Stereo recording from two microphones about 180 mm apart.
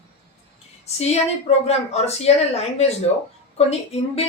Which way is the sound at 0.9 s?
35° left (ahead or behind).